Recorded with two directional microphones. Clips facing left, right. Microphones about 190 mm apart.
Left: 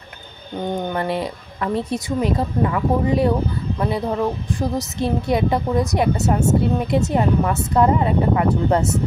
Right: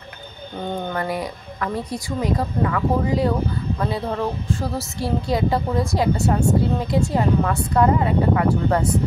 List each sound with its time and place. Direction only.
0.8 s a woman's voice: 25° left (ahead or behind)
4.6 s a woman's voice: 20° left (ahead or behind)